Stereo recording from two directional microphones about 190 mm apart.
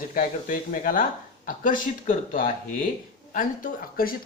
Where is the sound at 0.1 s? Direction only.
45° left (ahead or behind).